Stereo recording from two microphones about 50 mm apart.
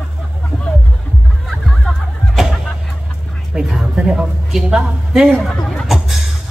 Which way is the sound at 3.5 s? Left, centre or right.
Centre.